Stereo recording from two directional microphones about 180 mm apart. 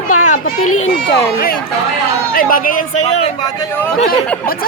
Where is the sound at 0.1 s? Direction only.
45° left (ahead or behind).